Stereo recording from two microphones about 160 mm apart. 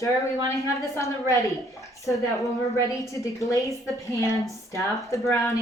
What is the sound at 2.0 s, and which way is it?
A woman's voice, 20° left (ahead or behind).